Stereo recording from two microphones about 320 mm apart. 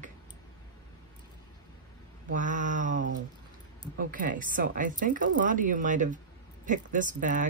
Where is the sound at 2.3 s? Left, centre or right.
Right.